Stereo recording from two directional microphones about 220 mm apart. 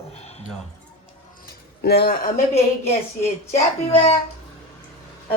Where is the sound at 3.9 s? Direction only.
25° left (ahead or behind).